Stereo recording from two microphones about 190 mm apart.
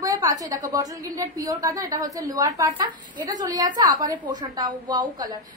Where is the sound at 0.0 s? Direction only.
15° right (ahead or behind).